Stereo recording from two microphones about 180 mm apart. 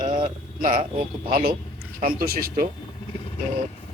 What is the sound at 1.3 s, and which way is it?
Speech, 55° right (ahead or behind).